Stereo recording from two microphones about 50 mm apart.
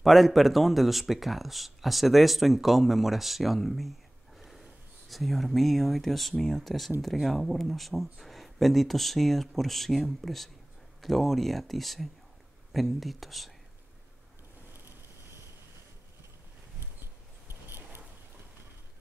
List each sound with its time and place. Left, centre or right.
0.0 s speech: centre
4.4 s snort: centre
5.1 s speech: centre
17.5 s a sound: right